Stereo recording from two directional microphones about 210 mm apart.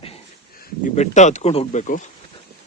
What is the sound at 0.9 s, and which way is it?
Speech, 35° left (ahead or behind).